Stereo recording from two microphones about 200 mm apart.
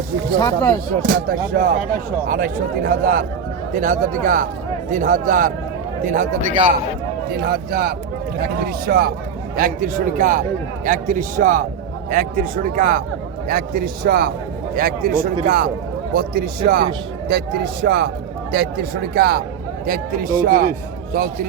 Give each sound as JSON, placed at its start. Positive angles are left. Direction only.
{"t": 0.3, "sound": "speech", "side_deg": 20}
{"t": 1.0, "sound": "a man's voice", "side_deg": -50}
{"t": 7.3, "sound": "a man's voice", "side_deg": -50}